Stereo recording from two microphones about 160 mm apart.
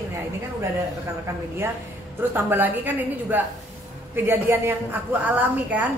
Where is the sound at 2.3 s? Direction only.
10° right (ahead or behind).